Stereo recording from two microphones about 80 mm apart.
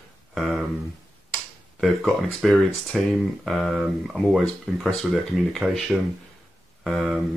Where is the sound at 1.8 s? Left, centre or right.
Centre.